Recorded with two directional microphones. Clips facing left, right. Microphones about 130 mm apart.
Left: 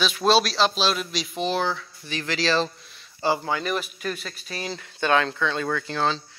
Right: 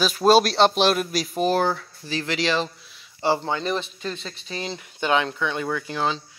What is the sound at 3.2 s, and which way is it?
Speech, 25° right (ahead or behind).